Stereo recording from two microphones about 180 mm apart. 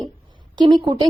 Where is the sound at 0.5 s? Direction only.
25° right (ahead or behind).